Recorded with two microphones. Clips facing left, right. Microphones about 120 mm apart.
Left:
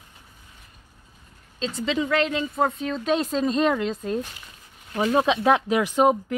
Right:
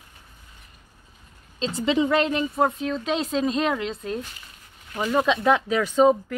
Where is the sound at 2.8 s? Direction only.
Centre (ahead or behind).